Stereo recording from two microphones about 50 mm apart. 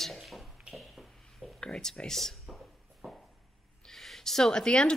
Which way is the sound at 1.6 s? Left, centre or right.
Centre.